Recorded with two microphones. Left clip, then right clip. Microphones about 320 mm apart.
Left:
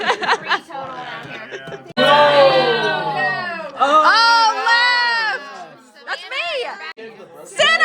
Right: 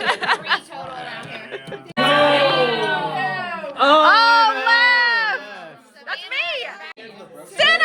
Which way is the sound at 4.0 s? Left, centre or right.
Centre.